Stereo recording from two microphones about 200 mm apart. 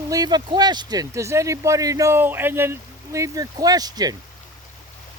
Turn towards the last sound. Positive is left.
turn(degrees=-20)  # may be behind; listen again after turning